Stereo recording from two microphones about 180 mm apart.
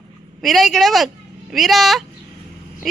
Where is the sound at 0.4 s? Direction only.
Centre (ahead or behind).